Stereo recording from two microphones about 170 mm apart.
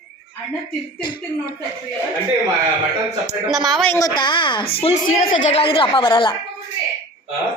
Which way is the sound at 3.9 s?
20° left (ahead or behind).